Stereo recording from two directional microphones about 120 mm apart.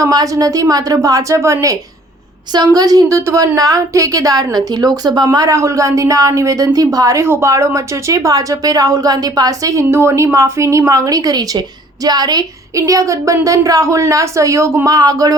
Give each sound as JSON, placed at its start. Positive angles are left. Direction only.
{"t": 0.0, "sound": "a woman's voice", "side_deg": -30}